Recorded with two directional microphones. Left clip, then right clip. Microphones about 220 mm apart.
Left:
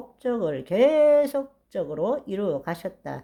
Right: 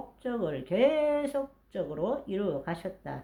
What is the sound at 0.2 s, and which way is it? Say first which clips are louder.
A woman's voice: left 7 dB; 40° left (ahead or behind).